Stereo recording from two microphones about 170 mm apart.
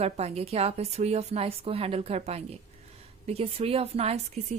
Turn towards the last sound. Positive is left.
turn(degrees=-40)  # may be behind; listen again after turning